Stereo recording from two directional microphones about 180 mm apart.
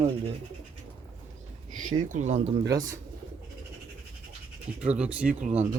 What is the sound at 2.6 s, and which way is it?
Speech, 20° right (ahead or behind).